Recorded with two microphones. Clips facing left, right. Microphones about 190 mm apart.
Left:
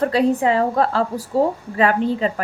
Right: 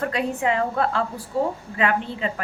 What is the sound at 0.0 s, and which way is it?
A woman's voice, 35° left (ahead or behind).